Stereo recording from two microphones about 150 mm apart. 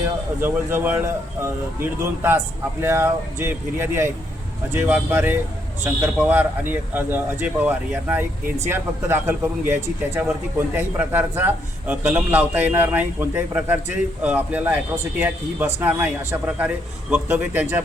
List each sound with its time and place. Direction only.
0.4 s a man's voice: 10° right (ahead or behind)